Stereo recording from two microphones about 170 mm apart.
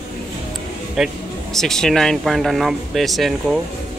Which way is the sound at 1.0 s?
5° right (ahead or behind).